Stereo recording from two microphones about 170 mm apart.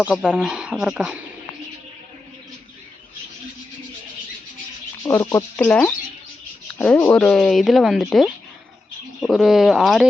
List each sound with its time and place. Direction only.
0.0 s speech: 5° right (ahead or behind)
5.0 s speech: 15° left (ahead or behind)
5.5 s speech: 5° left (ahead or behind)